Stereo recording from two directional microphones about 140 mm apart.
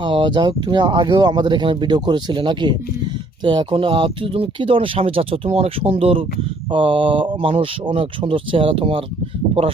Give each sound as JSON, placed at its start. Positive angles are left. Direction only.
{"t": 0.0, "sound": "speech", "side_deg": -35}